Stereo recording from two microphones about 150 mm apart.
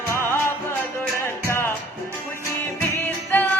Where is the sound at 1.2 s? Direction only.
15° left (ahead or behind).